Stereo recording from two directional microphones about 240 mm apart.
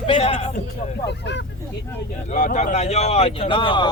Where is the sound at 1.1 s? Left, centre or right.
Left.